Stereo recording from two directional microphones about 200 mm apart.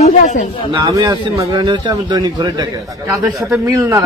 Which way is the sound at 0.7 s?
20° right (ahead or behind).